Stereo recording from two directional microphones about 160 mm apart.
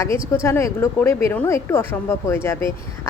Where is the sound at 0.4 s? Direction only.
15° left (ahead or behind).